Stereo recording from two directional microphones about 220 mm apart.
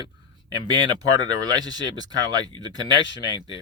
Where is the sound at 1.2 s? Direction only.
20° right (ahead or behind).